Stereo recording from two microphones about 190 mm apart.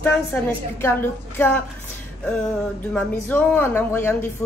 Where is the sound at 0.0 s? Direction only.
10° left (ahead or behind).